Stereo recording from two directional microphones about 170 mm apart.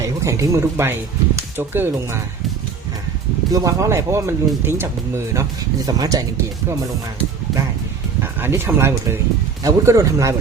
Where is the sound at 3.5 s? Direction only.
20° right (ahead or behind).